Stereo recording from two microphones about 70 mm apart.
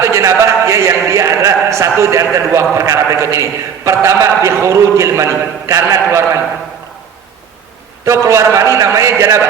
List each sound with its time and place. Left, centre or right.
0.0 s a sound: right
2.7 s a man's voice: right
8.0 s a man's voice: right